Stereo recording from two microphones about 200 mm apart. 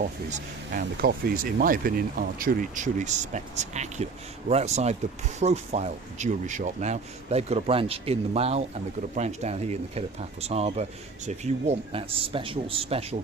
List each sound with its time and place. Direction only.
0.0 s speech: 40° right (ahead or behind)